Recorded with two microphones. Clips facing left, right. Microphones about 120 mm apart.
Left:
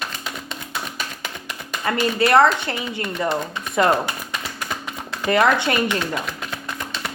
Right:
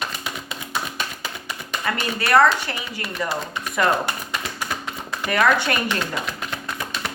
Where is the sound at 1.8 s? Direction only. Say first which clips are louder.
Left 6 dB; 25° left (ahead or behind).